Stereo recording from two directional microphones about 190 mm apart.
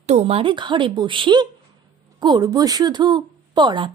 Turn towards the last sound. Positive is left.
turn(degrees=-25)  # may be behind; listen again after turning